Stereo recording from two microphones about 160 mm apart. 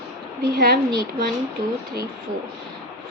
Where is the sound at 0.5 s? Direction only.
75° right (ahead or behind).